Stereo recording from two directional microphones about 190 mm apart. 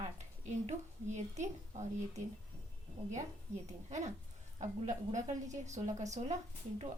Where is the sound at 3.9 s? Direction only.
40° right (ahead or behind).